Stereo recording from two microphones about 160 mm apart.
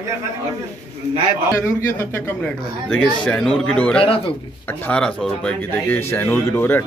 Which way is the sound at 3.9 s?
35° left (ahead or behind).